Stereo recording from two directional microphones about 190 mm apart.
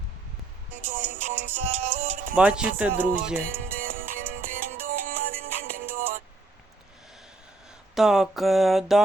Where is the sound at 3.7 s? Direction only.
45° right (ahead or behind).